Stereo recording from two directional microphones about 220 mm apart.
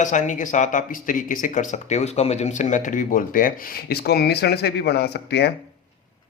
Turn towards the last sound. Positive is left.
turn(degrees=50)  # may be behind; listen again after turning